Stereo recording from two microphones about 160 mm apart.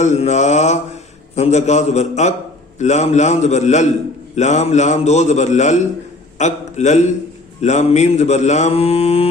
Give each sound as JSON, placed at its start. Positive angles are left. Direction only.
{"t": 0.0, "sound": "speech", "side_deg": 45}